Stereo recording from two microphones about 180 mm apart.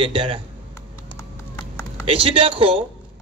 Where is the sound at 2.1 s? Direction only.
30° right (ahead or behind).